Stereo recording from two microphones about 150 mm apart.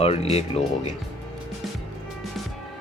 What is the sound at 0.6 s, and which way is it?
Speech, 45° left (ahead or behind).